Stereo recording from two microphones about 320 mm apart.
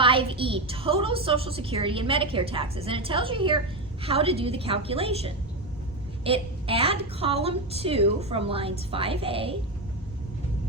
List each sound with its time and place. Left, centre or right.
0.0 s a woman's voice: centre